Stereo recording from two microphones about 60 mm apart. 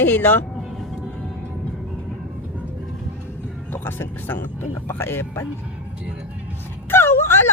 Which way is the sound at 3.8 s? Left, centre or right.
Left.